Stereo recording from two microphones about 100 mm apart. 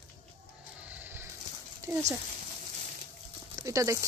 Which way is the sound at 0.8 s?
15° right (ahead or behind).